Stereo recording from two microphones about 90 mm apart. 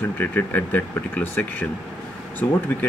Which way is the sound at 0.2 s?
20° left (ahead or behind).